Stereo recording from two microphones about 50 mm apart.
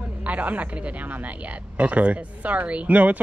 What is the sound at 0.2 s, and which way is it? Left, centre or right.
A woman's voice, right.